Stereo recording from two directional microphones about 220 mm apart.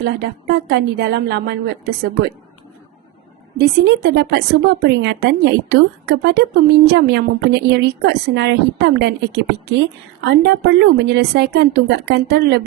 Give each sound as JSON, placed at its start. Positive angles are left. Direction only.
{"t": 0.0, "sound": "a woman's voice", "side_deg": -45}
{"t": 3.6, "sound": "a woman's voice", "side_deg": -50}